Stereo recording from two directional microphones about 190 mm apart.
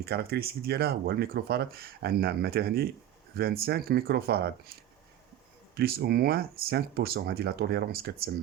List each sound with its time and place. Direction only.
0.0 s speech: 55° right (ahead or behind)